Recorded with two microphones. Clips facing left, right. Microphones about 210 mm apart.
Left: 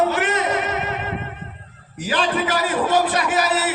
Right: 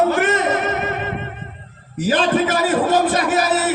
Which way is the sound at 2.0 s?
45° right (ahead or behind).